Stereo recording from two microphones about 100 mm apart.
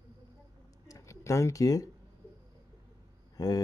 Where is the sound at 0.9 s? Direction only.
30° left (ahead or behind).